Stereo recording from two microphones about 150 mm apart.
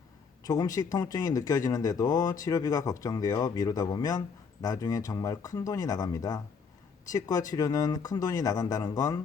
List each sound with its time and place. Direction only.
0.4 s speech: 25° left (ahead or behind)